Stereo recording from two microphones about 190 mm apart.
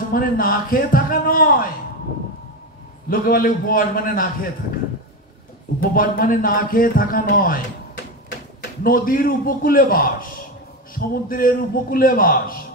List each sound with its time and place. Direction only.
0.1 s a man's voice: 50° left (ahead or behind)
3.1 s a man's voice: 50° left (ahead or behind)
5.8 s a man's voice: 50° left (ahead or behind)